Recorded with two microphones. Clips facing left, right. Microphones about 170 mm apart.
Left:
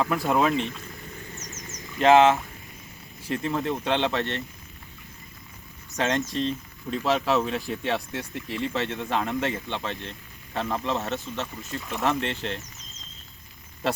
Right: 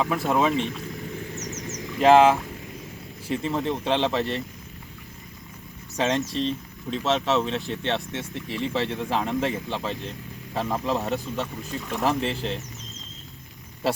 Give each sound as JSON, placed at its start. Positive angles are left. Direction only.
{"t": 0.0, "sound": "speech", "side_deg": 0}
{"t": 1.4, "sound": "a sound", "side_deg": -70}
{"t": 2.0, "sound": "speech", "side_deg": 0}
{"t": 6.0, "sound": "speech", "side_deg": 0}